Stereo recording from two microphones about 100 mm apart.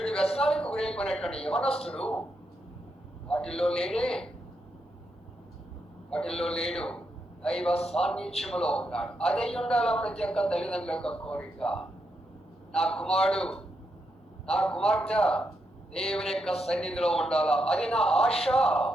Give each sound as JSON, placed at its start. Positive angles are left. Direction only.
{"t": 0.0, "sound": "a sound", "side_deg": 5}
{"t": 1.7, "sound": "a man's voice", "side_deg": 80}
{"t": 2.0, "sound": "a man's voice", "side_deg": 10}
{"t": 3.2, "sound": "a man's voice", "side_deg": 10}
{"t": 6.1, "sound": "a man's voice", "side_deg": 5}
{"t": 7.7, "sound": "speech", "side_deg": 90}
{"t": 7.9, "sound": "a man's voice", "side_deg": 5}